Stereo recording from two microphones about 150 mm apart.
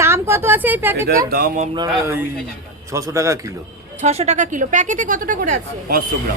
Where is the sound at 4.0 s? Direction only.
45° right (ahead or behind).